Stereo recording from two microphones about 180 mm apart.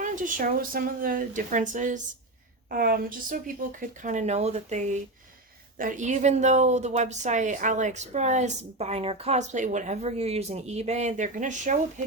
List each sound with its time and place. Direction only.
0.0 s speech: 45° right (ahead or behind)
2.6 s a woman's voice: 55° right (ahead or behind)